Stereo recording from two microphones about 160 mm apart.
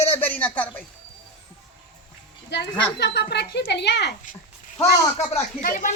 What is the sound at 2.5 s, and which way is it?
Speech, 90° left.